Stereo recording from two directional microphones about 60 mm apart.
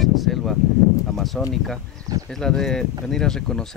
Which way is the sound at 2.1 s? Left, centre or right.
Right.